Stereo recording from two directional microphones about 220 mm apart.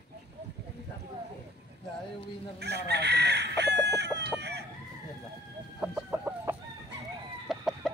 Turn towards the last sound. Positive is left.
turn(degrees=0)  # may be behind; listen again after turning